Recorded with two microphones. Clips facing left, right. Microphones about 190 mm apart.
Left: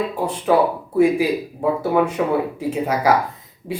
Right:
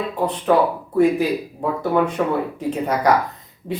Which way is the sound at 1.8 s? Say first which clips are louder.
Right 2 dB; 10° left (ahead or behind).